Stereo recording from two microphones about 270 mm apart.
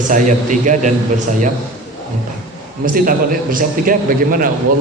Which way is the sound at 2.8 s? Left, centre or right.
Right.